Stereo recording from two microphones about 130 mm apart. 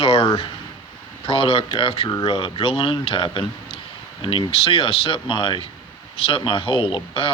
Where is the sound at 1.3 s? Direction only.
45° left (ahead or behind).